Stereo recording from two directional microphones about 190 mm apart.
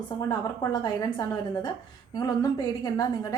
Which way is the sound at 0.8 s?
20° left (ahead or behind).